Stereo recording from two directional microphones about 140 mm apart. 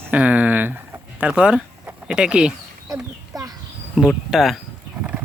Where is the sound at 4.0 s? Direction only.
Centre (ahead or behind).